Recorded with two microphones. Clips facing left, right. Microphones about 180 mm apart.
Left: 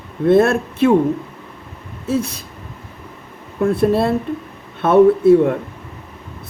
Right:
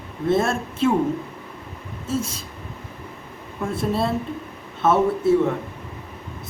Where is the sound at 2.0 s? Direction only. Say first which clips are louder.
Left 6 dB; 65° left (ahead or behind).